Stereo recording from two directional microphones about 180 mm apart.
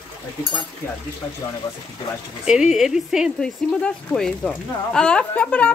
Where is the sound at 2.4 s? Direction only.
5° right (ahead or behind).